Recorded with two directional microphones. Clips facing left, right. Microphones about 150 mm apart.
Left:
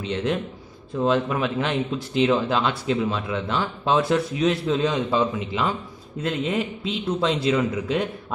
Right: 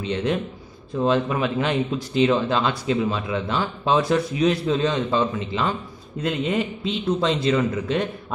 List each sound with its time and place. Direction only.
0.0 s a man's voice: centre (ahead or behind)